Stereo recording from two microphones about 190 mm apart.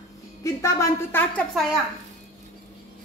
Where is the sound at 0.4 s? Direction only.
15° left (ahead or behind).